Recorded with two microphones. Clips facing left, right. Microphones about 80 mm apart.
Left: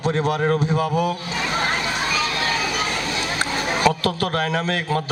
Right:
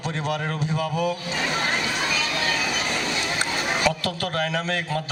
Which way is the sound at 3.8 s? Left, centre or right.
Left.